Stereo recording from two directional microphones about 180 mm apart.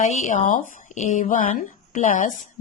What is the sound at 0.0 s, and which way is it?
A woman's voice, 40° left (ahead or behind).